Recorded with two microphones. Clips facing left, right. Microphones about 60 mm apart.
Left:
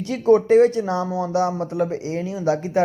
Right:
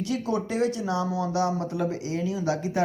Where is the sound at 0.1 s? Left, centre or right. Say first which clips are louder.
Left 15 dB; left.